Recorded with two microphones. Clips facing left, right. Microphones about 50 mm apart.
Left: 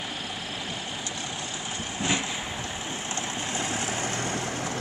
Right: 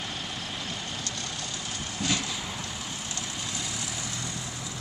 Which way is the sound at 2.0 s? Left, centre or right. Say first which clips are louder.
Left 2 dB; left.